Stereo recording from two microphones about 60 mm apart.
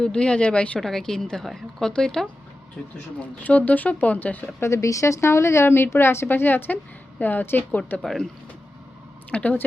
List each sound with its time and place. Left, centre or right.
0.0 s speech: centre
0.8 s a woman's voice: centre
3.2 s speech: left
4.6 s a woman's voice: left
8.0 s speech: centre
9.3 s speech: left